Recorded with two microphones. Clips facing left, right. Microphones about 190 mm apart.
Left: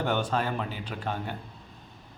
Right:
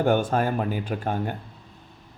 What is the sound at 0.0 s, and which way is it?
A man's voice, 50° right (ahead or behind).